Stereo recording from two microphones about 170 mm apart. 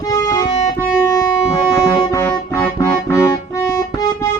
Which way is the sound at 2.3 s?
10° left (ahead or behind).